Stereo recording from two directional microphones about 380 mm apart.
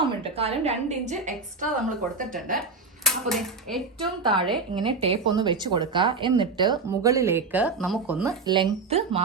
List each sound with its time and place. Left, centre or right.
0.0 s speech: centre
2.6 s speech: centre
4.4 s speech: centre